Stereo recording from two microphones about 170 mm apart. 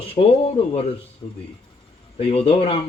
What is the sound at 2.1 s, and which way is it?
Speech, 35° left (ahead or behind).